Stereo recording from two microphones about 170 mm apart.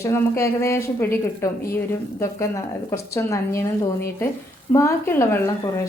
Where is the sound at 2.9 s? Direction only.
15° left (ahead or behind).